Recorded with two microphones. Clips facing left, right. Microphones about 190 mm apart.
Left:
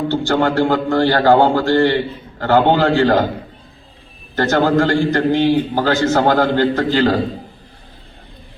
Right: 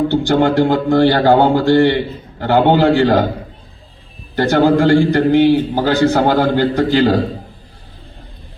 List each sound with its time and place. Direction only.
0.1 s a man's voice: 15° right (ahead or behind)
4.4 s a man's voice: 15° right (ahead or behind)